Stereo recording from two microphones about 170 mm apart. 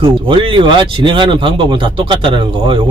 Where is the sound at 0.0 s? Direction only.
30° right (ahead or behind).